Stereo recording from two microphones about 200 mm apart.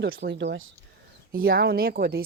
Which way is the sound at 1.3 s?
50° right (ahead or behind).